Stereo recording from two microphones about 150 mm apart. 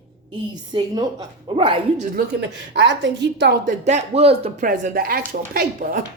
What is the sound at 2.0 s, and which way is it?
Speech, 65° right (ahead or behind).